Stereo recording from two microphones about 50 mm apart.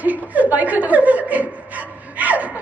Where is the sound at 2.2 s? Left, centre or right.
Right.